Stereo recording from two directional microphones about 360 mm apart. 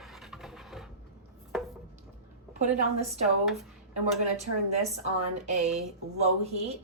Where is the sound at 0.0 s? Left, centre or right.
Centre.